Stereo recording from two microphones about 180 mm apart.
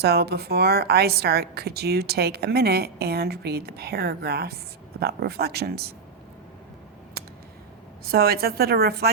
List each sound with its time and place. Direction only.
0.0 s a woman's voice: 65° right (ahead or behind)
8.0 s a woman's voice: 60° right (ahead or behind)